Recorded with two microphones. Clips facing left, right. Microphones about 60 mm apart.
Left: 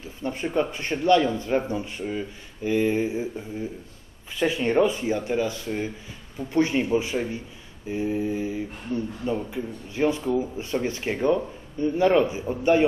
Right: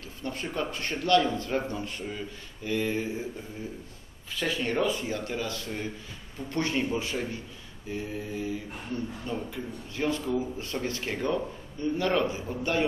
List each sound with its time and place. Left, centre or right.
0.0 s speech: centre
4.4 s speech: centre